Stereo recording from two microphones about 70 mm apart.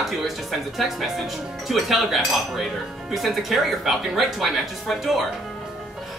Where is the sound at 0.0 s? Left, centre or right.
Centre.